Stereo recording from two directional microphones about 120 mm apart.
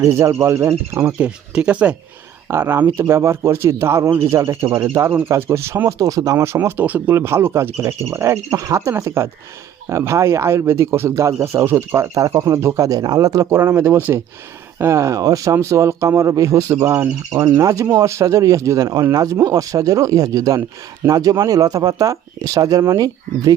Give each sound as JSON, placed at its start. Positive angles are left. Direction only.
{"t": 0.0, "sound": "speech", "side_deg": -25}
{"t": 1.5, "sound": "speech", "side_deg": -10}
{"t": 2.5, "sound": "speech", "side_deg": -20}